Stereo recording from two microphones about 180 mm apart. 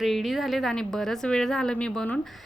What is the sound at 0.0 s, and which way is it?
Speech, centre (ahead or behind).